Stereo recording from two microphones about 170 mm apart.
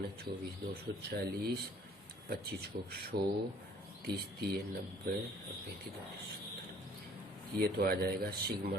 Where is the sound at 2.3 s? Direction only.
70° right (ahead or behind).